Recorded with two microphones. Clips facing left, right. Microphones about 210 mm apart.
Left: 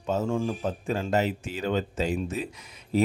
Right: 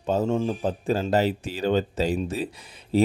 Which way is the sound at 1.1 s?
35° right (ahead or behind).